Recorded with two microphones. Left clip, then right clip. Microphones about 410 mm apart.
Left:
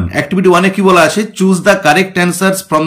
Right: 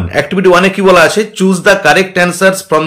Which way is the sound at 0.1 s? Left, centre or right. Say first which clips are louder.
Right 2 dB; centre.